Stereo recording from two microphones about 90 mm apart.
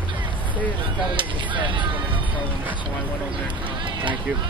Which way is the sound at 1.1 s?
65° right (ahead or behind).